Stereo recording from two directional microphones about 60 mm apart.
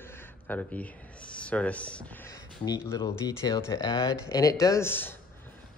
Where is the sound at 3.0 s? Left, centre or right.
Left.